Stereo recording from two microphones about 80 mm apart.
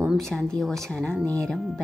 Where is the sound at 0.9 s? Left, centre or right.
Centre.